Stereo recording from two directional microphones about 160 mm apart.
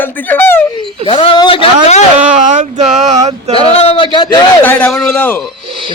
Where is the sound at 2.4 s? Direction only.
50° right (ahead or behind).